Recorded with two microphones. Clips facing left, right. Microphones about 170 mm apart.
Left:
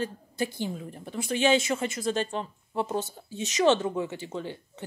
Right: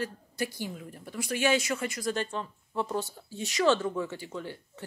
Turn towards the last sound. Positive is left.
turn(degrees=20)  # may be behind; listen again after turning